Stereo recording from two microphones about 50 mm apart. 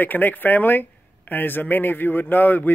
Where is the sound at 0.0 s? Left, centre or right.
Left.